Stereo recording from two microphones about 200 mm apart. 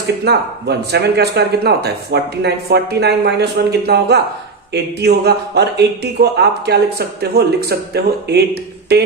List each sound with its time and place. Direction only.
0.3 s speech: 55° right (ahead or behind)